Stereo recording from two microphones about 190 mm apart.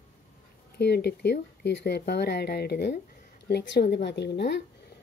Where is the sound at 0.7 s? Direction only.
60° left (ahead or behind).